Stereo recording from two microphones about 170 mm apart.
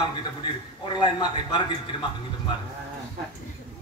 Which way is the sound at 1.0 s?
25° left (ahead or behind).